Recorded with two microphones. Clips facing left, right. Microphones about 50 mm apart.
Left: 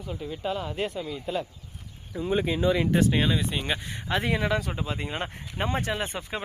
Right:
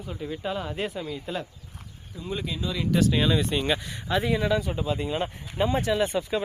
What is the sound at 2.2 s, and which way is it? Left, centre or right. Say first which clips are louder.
Speech: left 6 dB; left.